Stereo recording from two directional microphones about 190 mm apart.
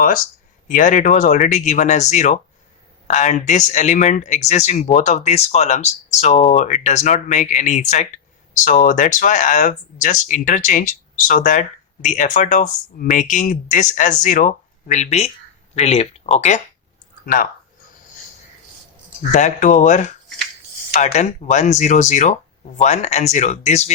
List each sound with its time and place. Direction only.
0.7 s speech: 40° left (ahead or behind)
17.2 s speech: 50° left (ahead or behind)
19.3 s speech: 40° left (ahead or behind)